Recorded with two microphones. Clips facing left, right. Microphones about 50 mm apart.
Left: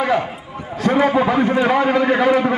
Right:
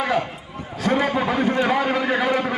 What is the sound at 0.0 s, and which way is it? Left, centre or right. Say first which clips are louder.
A man's voice: left 4 dB; centre.